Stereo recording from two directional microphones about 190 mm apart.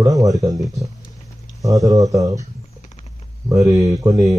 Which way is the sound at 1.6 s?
20° right (ahead or behind).